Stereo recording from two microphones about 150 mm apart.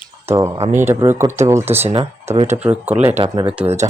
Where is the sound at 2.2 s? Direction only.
45° right (ahead or behind).